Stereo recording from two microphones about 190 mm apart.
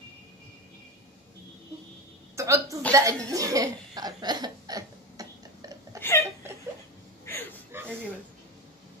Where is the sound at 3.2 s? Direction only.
15° right (ahead or behind).